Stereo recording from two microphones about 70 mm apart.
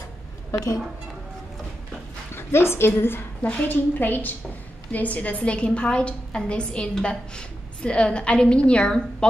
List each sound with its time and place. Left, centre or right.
2.3 s a woman's voice: left; by 9.3 s centre